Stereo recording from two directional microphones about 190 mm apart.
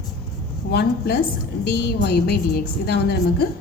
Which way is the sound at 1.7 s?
60° left (ahead or behind).